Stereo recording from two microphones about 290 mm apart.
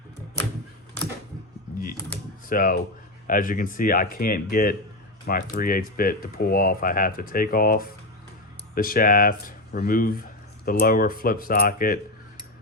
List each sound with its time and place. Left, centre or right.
2.5 s speech: left